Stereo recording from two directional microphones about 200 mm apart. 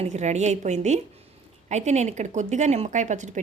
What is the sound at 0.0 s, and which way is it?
A woman's voice, 35° right (ahead or behind).